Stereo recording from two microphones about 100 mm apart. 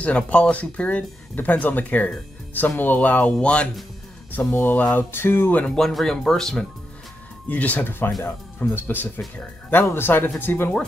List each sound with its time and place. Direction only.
0.0 s speech: 15° left (ahead or behind)
5.8 s speech: 5° left (ahead or behind)
7.4 s speech: 15° left (ahead or behind)